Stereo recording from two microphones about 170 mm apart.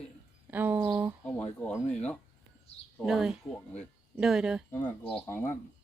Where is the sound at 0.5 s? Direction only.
10° right (ahead or behind).